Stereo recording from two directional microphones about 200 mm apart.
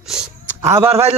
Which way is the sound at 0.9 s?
30° right (ahead or behind).